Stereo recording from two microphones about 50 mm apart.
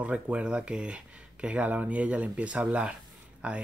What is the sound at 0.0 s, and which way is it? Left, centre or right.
Speech, right.